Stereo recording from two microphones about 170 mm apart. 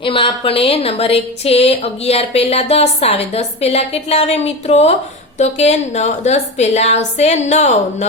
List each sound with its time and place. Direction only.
0.0 s speech: 30° left (ahead or behind)